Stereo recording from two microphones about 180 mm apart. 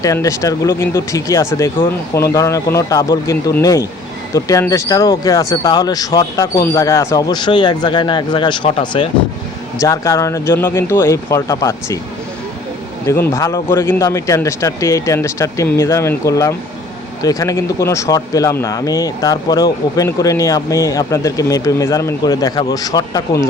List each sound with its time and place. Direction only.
0.0 s speech: 20° left (ahead or behind)
13.1 s speech: 15° left (ahead or behind)